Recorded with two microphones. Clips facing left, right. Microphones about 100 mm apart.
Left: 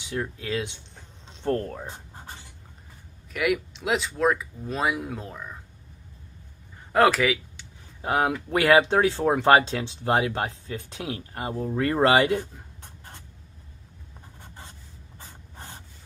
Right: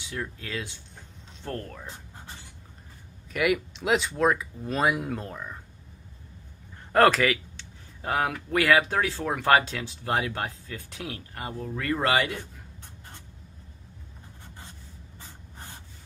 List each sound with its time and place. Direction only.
0.0 s speech: 20° left (ahead or behind)
3.3 s speech: centre (ahead or behind)
6.9 s a man's voice: 5° left (ahead or behind)
8.0 s speech: 20° left (ahead or behind)